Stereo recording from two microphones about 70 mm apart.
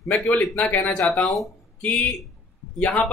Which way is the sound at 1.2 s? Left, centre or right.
Centre.